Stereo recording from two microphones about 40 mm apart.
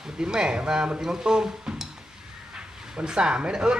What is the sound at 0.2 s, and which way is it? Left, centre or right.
Speech, centre.